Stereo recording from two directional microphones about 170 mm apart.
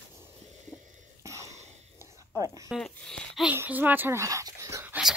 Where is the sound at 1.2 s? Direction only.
20° right (ahead or behind).